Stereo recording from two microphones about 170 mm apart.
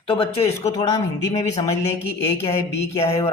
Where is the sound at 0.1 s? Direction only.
35° left (ahead or behind).